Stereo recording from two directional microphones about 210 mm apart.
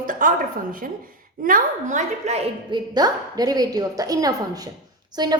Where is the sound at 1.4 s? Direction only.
40° right (ahead or behind).